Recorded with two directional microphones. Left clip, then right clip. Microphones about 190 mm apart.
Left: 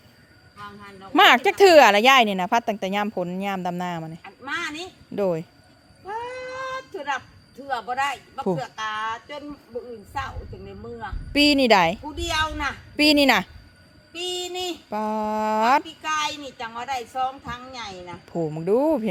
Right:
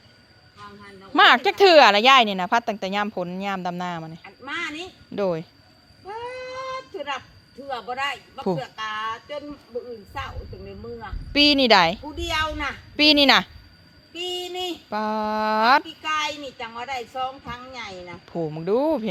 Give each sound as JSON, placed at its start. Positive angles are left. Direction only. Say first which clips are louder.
{"t": 0.6, "sound": "speech", "louder": "left 3 dB", "side_deg": -10}
{"t": 1.1, "sound": "speech", "louder": "even", "side_deg": 25}
{"t": 4.2, "sound": "a woman's voice", "louder": "left 2 dB", "side_deg": 5}
{"t": 5.1, "sound": "a sound", "louder": "left 1 dB", "side_deg": 15}
{"t": 18.6, "sound": "speech", "louder": "left 1 dB", "side_deg": 20}